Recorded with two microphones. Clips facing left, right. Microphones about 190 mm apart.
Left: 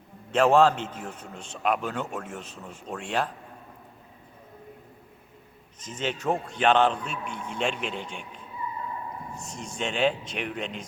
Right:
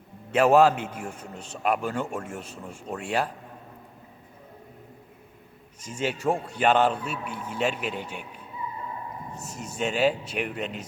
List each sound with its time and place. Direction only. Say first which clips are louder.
0.3 s a man's voice: right 1 dB; 10° right (ahead or behind)
5.8 s a man's voice: right 2 dB; 10° right (ahead or behind)
9.4 s speech: right 3 dB; 5° right (ahead or behind)